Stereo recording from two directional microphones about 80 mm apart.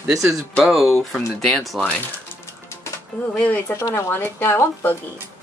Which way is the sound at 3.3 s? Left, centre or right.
Centre.